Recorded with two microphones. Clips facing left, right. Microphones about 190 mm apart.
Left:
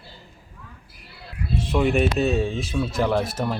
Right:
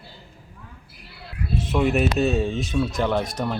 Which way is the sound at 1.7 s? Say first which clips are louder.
Left 1 dB; centre (ahead or behind).